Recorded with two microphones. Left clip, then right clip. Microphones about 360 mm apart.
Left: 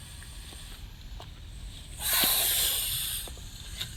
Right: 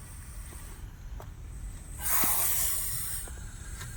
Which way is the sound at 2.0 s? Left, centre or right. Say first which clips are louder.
Left 5 dB; centre.